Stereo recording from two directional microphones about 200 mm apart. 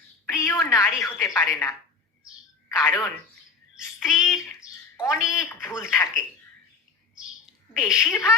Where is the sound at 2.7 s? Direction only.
15° left (ahead or behind).